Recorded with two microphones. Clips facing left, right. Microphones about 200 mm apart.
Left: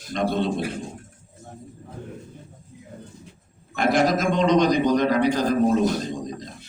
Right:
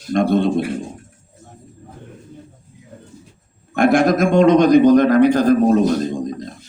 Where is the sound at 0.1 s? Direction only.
50° right (ahead or behind).